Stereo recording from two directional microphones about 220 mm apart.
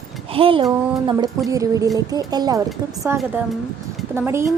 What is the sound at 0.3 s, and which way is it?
Speech, 25° right (ahead or behind).